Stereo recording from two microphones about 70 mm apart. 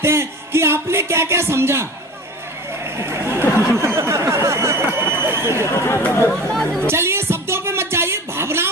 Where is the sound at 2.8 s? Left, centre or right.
Right.